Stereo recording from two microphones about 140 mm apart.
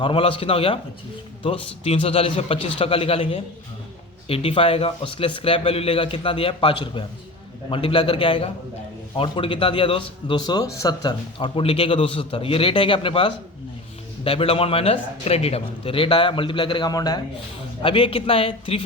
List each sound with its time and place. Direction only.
0.0 s a man's voice: 40° left (ahead or behind)
11.3 s speech: 40° left (ahead or behind)
17.8 s speech: 40° left (ahead or behind)